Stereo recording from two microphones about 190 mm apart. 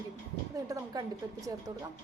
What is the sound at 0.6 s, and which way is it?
Speech, 20° right (ahead or behind).